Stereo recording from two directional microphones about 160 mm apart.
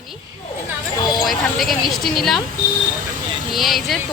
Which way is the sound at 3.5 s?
Centre (ahead or behind).